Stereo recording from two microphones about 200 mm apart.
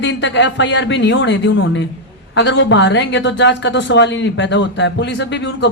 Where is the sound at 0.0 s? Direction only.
65° left (ahead or behind).